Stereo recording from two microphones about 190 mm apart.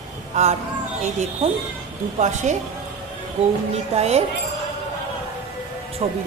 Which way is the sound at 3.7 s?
35° right (ahead or behind).